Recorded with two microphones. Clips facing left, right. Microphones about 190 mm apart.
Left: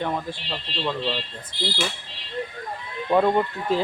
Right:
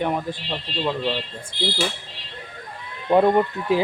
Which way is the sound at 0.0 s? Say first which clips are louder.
Right 3 dB; 15° right (ahead or behind).